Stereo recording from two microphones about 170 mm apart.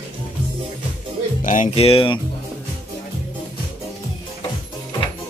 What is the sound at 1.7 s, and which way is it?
Speech, 35° left (ahead or behind).